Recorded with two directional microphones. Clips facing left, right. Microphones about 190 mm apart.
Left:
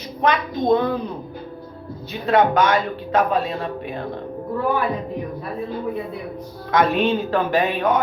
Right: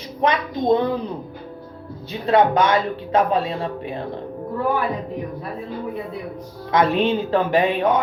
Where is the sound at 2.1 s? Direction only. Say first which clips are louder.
Right 1 dB; 30° right (ahead or behind).